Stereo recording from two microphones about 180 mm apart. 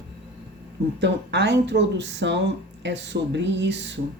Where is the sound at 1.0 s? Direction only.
75° right (ahead or behind).